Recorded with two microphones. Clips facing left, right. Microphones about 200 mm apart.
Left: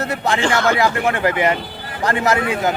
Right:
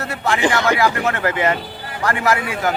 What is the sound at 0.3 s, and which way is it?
Speech, 15° right (ahead or behind).